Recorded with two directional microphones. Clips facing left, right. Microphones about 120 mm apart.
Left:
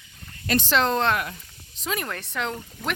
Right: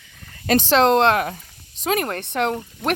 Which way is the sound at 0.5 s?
90° right.